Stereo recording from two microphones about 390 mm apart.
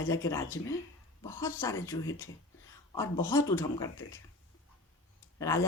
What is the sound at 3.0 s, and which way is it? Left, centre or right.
Speech, centre.